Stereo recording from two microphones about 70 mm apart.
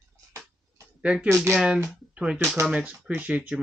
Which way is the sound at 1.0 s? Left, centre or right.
Centre.